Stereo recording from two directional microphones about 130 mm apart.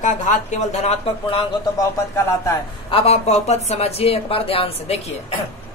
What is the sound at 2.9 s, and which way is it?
Speech, 50° left (ahead or behind).